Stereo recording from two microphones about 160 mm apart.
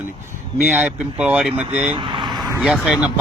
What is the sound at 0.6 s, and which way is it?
Speech, 10° right (ahead or behind).